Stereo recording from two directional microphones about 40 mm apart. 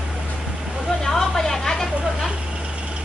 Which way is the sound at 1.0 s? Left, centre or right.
Centre.